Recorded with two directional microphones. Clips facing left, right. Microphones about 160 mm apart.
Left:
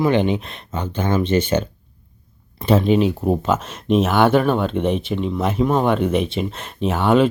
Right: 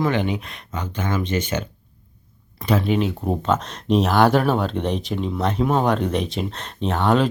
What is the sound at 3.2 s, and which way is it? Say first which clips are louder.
Speech: left 3 dB; 5° left (ahead or behind).